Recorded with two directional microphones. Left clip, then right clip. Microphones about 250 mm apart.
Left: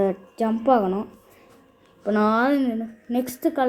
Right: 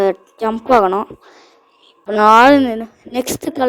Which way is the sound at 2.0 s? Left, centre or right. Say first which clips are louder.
Right 12 dB; right.